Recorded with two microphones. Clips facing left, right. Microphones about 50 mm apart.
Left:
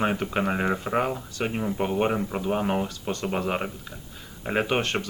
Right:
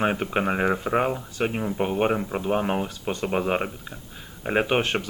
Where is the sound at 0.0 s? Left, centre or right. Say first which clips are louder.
Right 1 dB; right.